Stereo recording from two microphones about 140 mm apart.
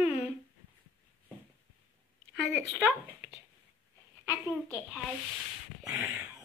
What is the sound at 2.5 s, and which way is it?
Speech, 10° right (ahead or behind).